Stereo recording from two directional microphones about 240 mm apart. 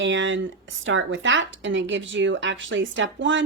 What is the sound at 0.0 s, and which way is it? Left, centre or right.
Speech, right.